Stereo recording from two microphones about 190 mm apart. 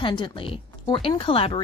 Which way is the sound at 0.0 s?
25° left (ahead or behind).